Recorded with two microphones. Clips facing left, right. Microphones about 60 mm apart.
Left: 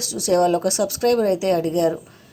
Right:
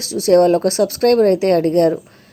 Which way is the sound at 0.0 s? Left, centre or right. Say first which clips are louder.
Right 6 dB; right.